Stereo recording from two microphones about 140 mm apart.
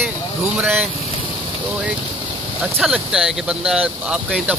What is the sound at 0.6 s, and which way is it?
Speech, centre (ahead or behind).